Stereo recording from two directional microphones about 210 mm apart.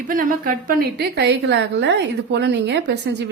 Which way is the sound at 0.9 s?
50° right (ahead or behind).